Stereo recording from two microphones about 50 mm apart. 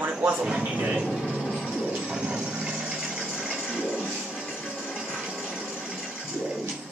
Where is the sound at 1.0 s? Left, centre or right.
Centre.